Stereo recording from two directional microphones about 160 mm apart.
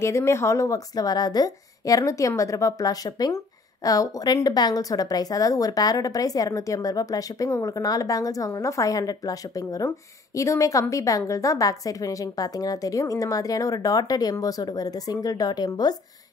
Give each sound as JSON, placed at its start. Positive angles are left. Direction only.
{"t": 0.0, "sound": "a woman's voice", "side_deg": 15}